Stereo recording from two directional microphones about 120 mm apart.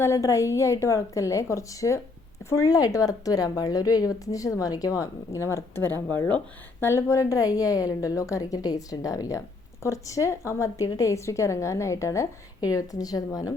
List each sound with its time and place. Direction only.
0.0 s a woman's voice: 25° left (ahead or behind)